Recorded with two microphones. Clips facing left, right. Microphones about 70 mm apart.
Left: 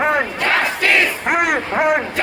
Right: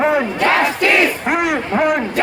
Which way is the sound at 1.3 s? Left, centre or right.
Centre.